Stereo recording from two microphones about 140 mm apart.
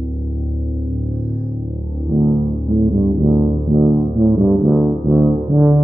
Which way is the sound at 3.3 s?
20° right (ahead or behind).